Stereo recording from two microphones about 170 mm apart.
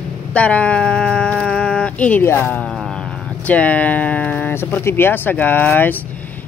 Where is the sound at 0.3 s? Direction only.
5° left (ahead or behind).